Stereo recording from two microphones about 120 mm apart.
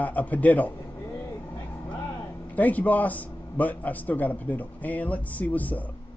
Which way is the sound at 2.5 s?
15° left (ahead or behind).